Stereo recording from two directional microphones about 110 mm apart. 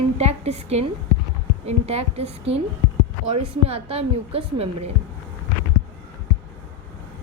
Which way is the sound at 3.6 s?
60° right (ahead or behind).